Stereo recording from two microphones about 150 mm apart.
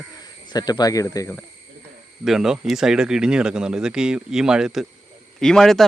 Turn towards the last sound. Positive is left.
turn(degrees=0)  # may be behind; listen again after turning